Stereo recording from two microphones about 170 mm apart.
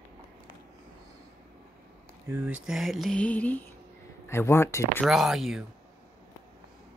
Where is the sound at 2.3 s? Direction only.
5° right (ahead or behind); by 3.6 s 10° left (ahead or behind).